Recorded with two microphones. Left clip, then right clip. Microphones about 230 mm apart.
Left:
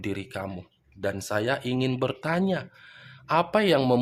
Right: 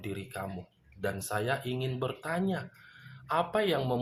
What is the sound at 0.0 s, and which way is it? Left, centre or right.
Speech, left.